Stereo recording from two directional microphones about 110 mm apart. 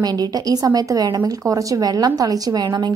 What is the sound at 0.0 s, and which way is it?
A woman's voice, 35° right (ahead or behind).